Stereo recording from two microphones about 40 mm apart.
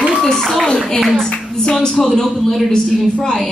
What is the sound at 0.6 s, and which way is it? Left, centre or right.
Speech, left.